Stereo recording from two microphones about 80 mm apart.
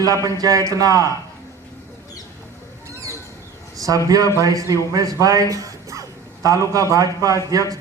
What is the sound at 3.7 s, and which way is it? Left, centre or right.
A man's voice, right.